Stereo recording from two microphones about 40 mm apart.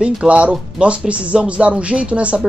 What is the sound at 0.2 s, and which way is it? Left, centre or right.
Speech, right.